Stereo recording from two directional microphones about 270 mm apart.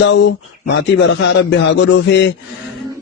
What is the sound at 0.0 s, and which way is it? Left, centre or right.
Speech, left.